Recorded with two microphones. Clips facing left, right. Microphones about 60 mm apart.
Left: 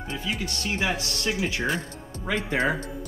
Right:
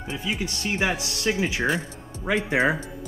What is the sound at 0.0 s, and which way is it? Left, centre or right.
Speech, centre.